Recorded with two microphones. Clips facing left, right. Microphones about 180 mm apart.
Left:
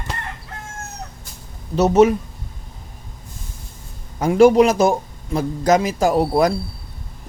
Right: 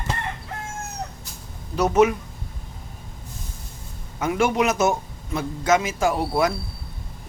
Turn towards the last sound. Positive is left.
turn(degrees=35)  # may be behind; listen again after turning